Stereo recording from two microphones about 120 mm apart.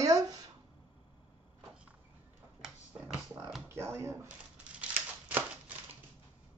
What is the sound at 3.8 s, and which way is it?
Speech, 25° right (ahead or behind).